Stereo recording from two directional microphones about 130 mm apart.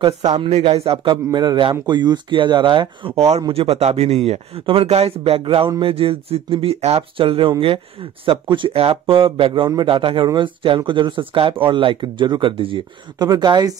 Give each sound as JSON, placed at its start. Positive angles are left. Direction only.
{"t": 0.4, "sound": "speech", "side_deg": -50}
{"t": 0.9, "sound": "speech", "side_deg": -35}
{"t": 13.3, "sound": "speech", "side_deg": -30}